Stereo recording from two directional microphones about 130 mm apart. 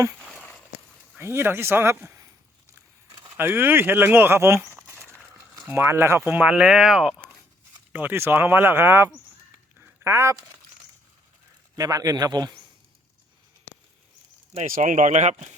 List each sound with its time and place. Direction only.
0.2 s a sound: 5° left (ahead or behind)
1.1 s speech: 20° right (ahead or behind)
3.3 s speech: 15° right (ahead or behind)
7.9 s speech: 15° right (ahead or behind)
11.8 s a man's voice: 25° right (ahead or behind)
14.5 s speech: 70° right (ahead or behind)